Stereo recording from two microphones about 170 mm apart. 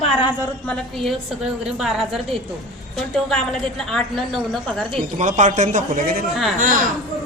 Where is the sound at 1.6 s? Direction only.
Centre (ahead or behind).